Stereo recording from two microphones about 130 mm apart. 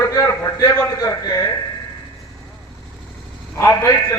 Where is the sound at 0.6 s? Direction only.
25° left (ahead or behind).